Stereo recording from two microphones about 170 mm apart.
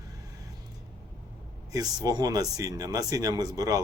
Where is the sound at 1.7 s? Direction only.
20° right (ahead or behind).